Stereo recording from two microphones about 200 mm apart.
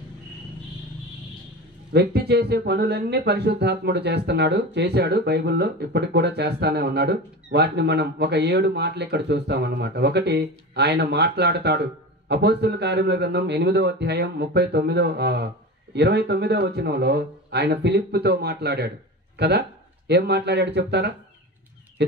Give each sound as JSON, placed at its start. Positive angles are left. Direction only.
{"t": 1.9, "sound": "speech", "side_deg": -55}